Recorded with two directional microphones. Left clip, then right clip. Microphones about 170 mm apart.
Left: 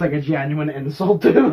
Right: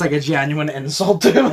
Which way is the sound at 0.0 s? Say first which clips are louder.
Right 3 dB; 50° right (ahead or behind).